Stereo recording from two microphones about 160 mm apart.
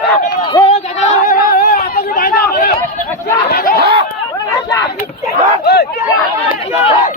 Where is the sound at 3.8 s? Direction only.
85° right.